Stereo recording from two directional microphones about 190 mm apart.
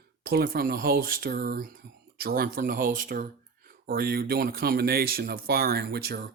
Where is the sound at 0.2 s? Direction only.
50° right (ahead or behind).